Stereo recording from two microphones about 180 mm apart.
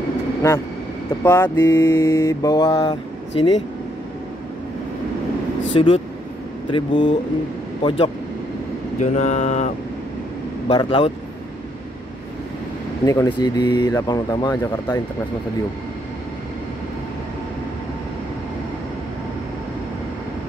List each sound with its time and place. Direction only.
1.2 s mantra: 15° left (ahead or behind)
5.7 s mantra: 30° left (ahead or behind)
6.7 s speech: 25° left (ahead or behind)
9.0 s mantra: 40° left (ahead or behind)
10.7 s speech: 25° left (ahead or behind)
13.0 s speech: 20° left (ahead or behind)